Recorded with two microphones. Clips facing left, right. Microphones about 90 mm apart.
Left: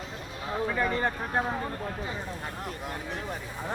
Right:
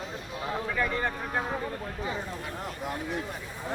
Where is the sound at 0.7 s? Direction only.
30° left (ahead or behind).